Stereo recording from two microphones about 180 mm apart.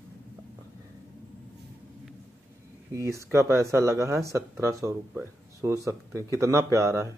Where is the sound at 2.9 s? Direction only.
15° right (ahead or behind).